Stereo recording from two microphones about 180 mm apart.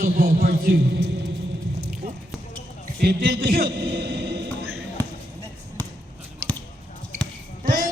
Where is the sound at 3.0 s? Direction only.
60° right (ahead or behind).